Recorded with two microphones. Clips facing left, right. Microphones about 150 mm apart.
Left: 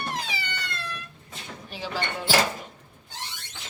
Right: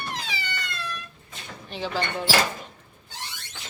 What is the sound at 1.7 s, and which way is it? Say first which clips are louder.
Speech: right 3 dB; 5° left (ahead or behind).